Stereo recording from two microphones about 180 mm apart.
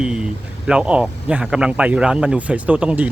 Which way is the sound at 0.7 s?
5° right (ahead or behind).